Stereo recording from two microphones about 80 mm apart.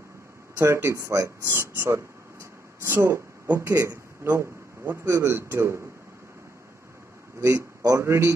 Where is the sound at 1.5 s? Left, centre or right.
Right.